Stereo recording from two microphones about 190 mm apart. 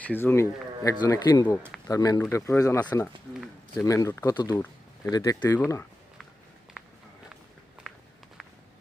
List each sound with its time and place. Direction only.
0.0 s speech: 10° left (ahead or behind)